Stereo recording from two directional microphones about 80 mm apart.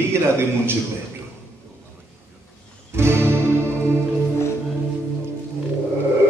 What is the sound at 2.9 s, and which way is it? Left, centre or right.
Music, right.